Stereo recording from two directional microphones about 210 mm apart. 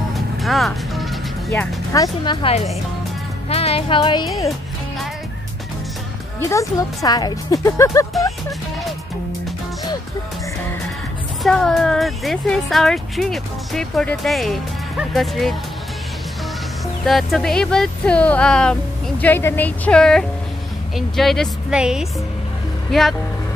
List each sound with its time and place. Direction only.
0.1 s music: centre (ahead or behind)
1.5 s speech: 15° left (ahead or behind)
6.5 s speech: 15° left (ahead or behind)
11.4 s speech: centre (ahead or behind)
17.0 s speech: centre (ahead or behind)